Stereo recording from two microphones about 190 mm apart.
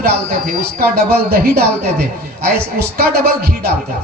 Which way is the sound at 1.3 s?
55° right (ahead or behind).